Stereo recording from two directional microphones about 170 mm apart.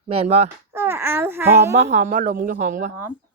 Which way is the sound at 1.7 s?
40° right (ahead or behind).